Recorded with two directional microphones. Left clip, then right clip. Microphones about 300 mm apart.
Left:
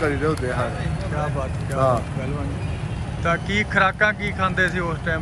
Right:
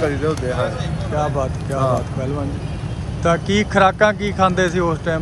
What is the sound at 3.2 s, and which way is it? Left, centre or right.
Speech, centre.